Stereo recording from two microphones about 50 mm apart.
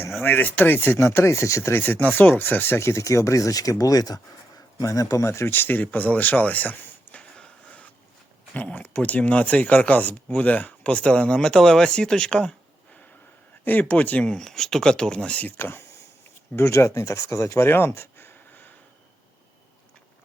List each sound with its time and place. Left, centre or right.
0.2 s speech: left
1.7 s speech: left
2.7 s speech: left
4.9 s speech: left
5.5 s speech: left
7.2 s a sound: centre
8.5 s speech: left
11.3 s speech: centre
13.7 s speech: left
14.3 s speech: centre
15.5 s speech: left
16.6 s speech: left